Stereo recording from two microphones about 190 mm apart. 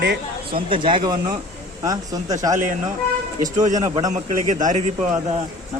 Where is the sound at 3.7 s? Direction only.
20° right (ahead or behind).